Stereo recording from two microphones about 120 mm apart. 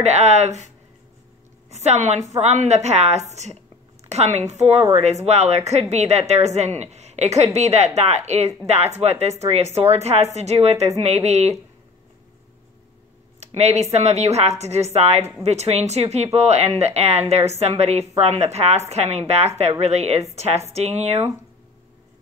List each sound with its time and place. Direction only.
0.0 s a woman's voice: 70° right (ahead or behind)
1.7 s a woman's voice: 65° right (ahead or behind)
13.4 s speech: 65° right (ahead or behind)